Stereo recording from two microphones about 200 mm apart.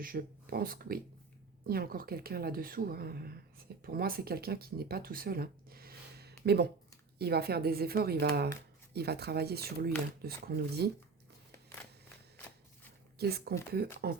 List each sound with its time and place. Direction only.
0.0 s speech: 45° right (ahead or behind)
13.1 s speech: 50° right (ahead or behind)